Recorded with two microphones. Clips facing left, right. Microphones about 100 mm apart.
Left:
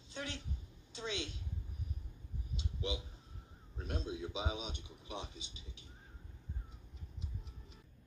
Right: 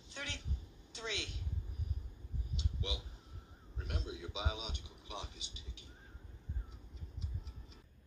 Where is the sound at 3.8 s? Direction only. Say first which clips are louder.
Left 4 dB; 30° left (ahead or behind).